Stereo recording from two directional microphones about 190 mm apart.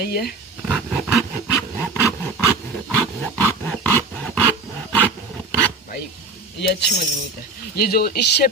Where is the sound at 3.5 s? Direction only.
10° left (ahead or behind).